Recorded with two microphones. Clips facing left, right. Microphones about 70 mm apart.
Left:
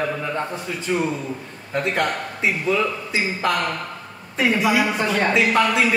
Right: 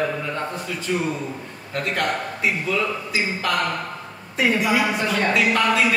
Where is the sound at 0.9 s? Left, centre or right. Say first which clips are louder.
Left 2 dB; centre.